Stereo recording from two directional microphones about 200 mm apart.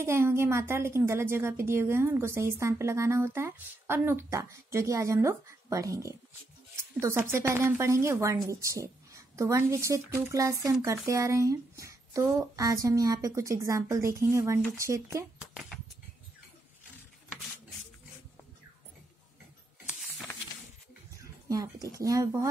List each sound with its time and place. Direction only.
0.0 s a woman's voice: 15° right (ahead or behind)
19.9 s a sound: centre (ahead or behind)
21.2 s speech: 15° right (ahead or behind)